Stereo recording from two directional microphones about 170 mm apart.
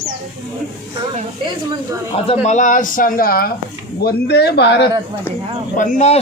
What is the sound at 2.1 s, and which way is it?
Speech, 35° left (ahead or behind).